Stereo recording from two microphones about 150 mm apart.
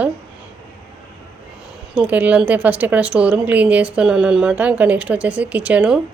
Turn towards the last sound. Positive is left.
turn(degrees=-5)  # may be behind; listen again after turning